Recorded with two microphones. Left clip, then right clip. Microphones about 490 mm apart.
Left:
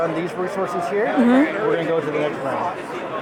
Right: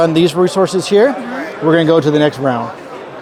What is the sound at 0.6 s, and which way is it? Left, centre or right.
Speech, right.